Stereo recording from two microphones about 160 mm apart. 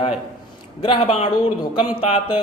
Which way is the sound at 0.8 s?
30° left (ahead or behind).